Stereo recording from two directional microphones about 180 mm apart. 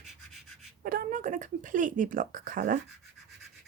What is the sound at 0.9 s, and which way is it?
Speech, 50° right (ahead or behind).